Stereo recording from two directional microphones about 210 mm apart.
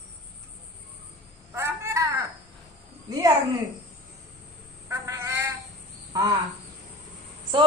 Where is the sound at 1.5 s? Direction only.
10° right (ahead or behind).